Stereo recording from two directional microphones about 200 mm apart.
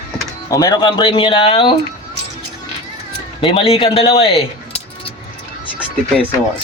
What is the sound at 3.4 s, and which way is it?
Speech, 25° left (ahead or behind).